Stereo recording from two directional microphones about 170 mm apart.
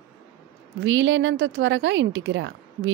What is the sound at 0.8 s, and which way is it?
Speech, 90° right.